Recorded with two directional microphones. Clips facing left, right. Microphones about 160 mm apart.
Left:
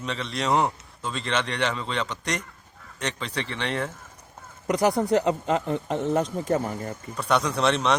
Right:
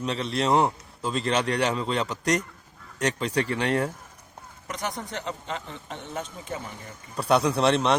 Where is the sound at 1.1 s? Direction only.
40° right (ahead or behind).